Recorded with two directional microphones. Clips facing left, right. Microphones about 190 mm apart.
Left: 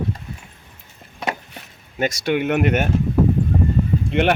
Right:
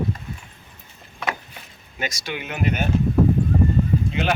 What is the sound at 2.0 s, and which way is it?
Speech, 60° left (ahead or behind).